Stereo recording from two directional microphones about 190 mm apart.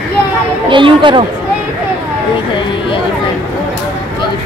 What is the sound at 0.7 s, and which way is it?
Speech, 25° right (ahead or behind).